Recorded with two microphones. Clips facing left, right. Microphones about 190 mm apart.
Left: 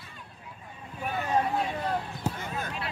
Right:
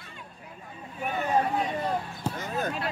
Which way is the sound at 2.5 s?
40° right (ahead or behind).